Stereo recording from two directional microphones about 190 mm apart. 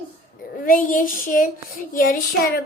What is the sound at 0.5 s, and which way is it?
A child's voice, 45° left (ahead or behind).